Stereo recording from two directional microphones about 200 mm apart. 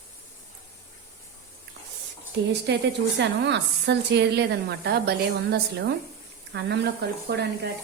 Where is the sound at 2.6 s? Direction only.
60° right (ahead or behind).